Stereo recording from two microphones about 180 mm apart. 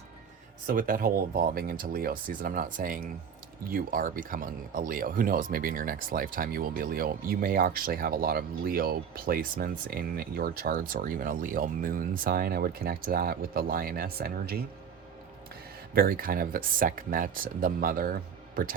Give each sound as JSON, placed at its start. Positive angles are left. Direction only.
{"t": 0.7, "sound": "speech", "side_deg": -50}
{"t": 16.0, "sound": "speech", "side_deg": -55}